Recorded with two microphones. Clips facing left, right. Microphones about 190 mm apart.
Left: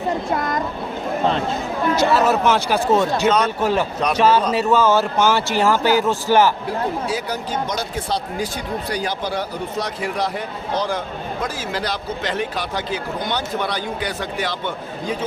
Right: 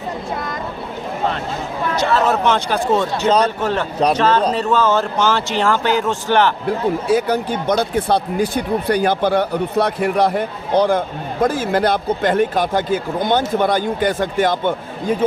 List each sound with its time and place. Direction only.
2.0 s speech: 10° left (ahead or behind)
3.2 s a man's voice: 35° right (ahead or behind)
3.6 s speech: 10° left (ahead or behind)
7.1 s speech: 55° right (ahead or behind)